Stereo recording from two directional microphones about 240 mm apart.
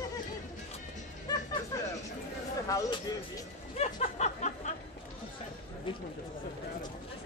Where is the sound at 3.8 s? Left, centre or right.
Left.